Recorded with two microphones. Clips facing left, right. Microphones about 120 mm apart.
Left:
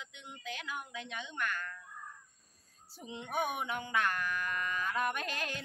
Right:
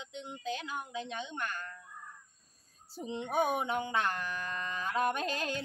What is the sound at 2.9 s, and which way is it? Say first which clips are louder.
Speech: right 5 dB; 30° right (ahead or behind).